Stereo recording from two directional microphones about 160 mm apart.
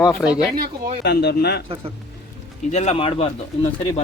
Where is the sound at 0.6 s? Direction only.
50° right (ahead or behind).